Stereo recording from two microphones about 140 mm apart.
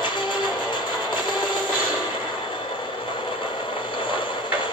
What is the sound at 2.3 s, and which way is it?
Vehicle, 35° left (ahead or behind).